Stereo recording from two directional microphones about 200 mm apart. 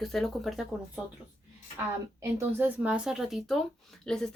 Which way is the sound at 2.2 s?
10° right (ahead or behind).